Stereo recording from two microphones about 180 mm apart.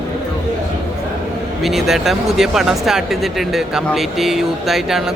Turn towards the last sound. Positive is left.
turn(degrees=0)  # may be behind; listen again after turning